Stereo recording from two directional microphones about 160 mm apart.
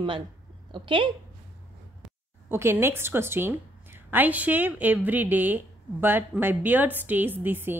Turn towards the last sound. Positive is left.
turn(degrees=-10)  # may be behind; listen again after turning